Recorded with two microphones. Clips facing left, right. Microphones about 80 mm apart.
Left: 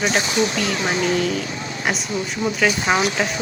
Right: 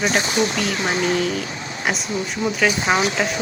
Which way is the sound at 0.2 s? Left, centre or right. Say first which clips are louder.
Even; right.